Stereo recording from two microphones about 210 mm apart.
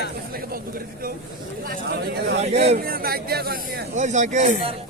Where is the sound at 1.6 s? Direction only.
45° right (ahead or behind).